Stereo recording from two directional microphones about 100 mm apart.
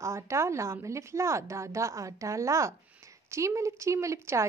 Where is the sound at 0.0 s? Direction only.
30° right (ahead or behind).